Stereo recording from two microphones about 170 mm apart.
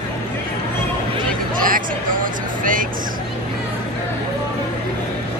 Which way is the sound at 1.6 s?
55° right (ahead or behind).